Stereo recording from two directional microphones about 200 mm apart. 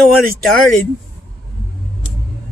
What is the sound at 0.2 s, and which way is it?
Speech, centre (ahead or behind).